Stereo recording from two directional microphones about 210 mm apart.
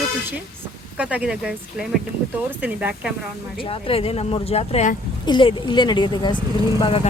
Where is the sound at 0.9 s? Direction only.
5° right (ahead or behind).